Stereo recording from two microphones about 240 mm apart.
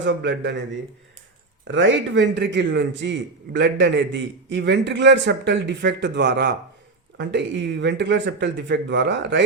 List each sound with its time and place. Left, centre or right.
0.0 s a man's voice: right
1.6 s a man's voice: right